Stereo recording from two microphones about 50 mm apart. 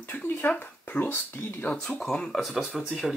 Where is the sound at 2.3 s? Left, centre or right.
Centre.